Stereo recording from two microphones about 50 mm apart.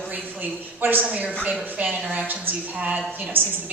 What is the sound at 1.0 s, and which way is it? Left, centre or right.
A woman's voice, right.